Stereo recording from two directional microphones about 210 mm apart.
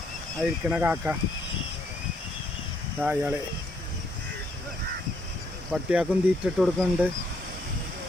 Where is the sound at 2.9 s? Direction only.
5° right (ahead or behind).